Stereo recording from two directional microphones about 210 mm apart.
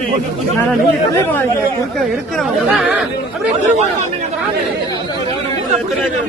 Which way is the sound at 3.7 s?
35° right (ahead or behind).